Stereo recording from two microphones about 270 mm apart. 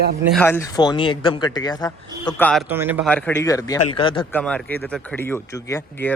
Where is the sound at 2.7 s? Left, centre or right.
Centre.